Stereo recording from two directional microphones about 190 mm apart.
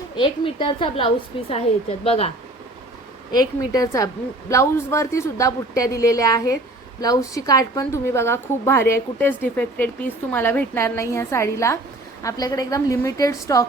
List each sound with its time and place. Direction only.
0.2 s a woman's voice: 25° left (ahead or behind)
3.3 s a woman's voice: 20° left (ahead or behind)